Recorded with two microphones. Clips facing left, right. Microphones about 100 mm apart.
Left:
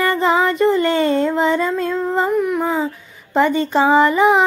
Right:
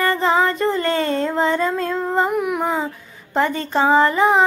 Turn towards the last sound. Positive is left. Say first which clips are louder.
# left 2 dB
turn(degrees=0)  # may be behind; listen again after turning